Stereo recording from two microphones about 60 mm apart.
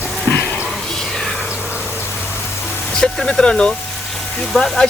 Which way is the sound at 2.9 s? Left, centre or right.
Centre.